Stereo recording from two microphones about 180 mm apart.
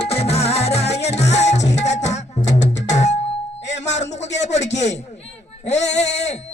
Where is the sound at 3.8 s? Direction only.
40° left (ahead or behind).